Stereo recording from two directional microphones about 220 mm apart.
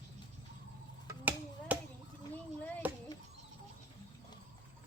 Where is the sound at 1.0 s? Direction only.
5° right (ahead or behind).